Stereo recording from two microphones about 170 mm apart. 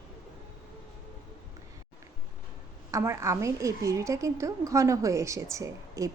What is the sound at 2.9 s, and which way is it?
A woman's voice, 15° right (ahead or behind).